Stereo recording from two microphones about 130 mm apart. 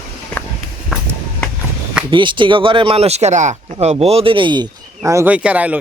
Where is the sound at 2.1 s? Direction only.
40° right (ahead or behind); by 3.7 s 65° right (ahead or behind).